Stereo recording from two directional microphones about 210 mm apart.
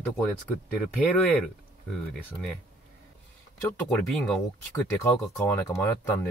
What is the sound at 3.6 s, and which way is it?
Speech, 5° left (ahead or behind).